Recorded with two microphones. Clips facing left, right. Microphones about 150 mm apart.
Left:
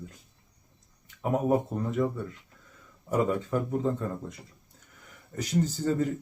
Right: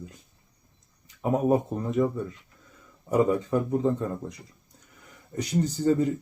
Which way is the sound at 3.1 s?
20° right (ahead or behind).